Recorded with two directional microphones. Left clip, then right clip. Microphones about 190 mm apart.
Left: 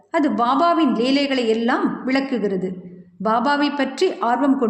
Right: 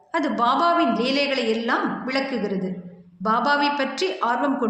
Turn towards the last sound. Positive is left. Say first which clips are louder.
# left 3 dB
turn(degrees=50)  # may be behind; listen again after turning